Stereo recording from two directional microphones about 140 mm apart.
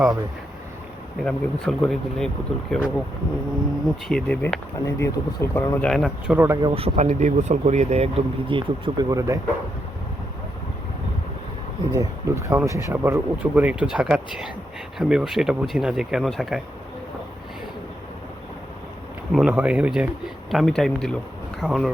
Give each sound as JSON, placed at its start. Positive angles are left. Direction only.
{"t": 1.2, "sound": "speech", "side_deg": 5}
{"t": 4.1, "sound": "speech", "side_deg": 5}
{"t": 4.9, "sound": "speech", "side_deg": 20}
{"t": 5.9, "sound": "speech", "side_deg": 0}
{"t": 6.3, "sound": "speech", "side_deg": -20}
{"t": 6.6, "sound": "speech", "side_deg": -45}
{"t": 9.0, "sound": "speech", "side_deg": -25}
{"t": 11.9, "sound": "speech", "side_deg": -20}
{"t": 19.3, "sound": "speech", "side_deg": 0}